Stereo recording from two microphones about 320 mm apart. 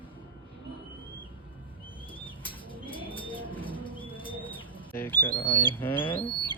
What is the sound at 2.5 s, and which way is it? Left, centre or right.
Bird, centre.